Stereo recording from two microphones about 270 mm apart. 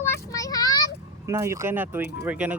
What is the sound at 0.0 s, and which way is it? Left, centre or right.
Child singing, centre.